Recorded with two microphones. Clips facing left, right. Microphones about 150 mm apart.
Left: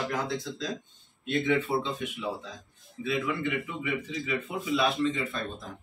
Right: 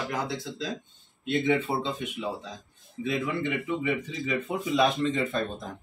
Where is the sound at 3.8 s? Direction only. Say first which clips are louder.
Right 3 dB; 40° right (ahead or behind).